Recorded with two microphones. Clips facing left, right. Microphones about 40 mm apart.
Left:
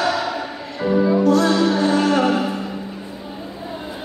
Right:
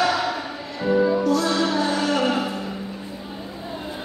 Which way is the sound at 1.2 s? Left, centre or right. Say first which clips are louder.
Left 5 dB; left.